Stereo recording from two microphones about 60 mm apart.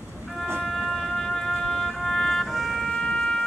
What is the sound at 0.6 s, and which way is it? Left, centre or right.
Music, centre.